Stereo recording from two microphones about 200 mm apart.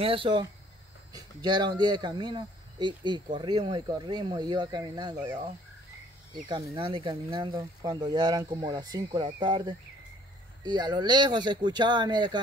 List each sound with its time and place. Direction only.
0.0 s speech: 25° right (ahead or behind)
6.4 s speech: 20° right (ahead or behind)